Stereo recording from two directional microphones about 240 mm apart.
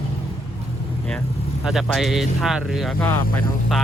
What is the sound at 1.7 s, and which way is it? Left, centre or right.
Speech, centre.